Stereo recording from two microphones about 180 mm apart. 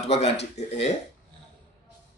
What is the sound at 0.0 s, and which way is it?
Speech, 35° left (ahead or behind).